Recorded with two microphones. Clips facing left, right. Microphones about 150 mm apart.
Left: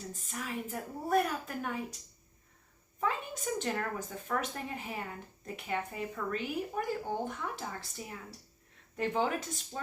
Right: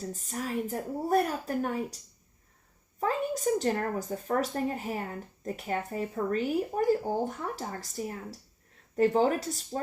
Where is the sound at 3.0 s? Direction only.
40° right (ahead or behind).